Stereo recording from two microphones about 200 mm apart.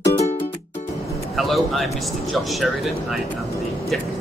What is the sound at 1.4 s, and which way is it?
A man's voice, centre (ahead or behind).